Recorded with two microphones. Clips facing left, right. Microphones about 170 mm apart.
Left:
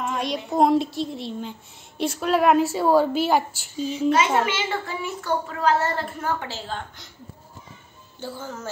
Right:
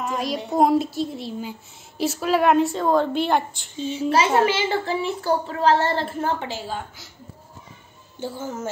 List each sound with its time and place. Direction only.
0.0 s a sound: centre (ahead or behind)
0.5 s a woman's voice: centre (ahead or behind)
3.7 s a child's voice: 30° right (ahead or behind)
6.4 s a woman's voice: 15° right (ahead or behind)
8.2 s speech: 20° right (ahead or behind)